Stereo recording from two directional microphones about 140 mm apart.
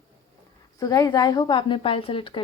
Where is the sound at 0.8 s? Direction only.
25° left (ahead or behind).